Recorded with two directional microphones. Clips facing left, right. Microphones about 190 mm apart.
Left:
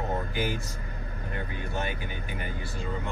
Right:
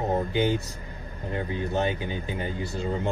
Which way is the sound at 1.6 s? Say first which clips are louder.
Right 8 dB; 20° right (ahead or behind).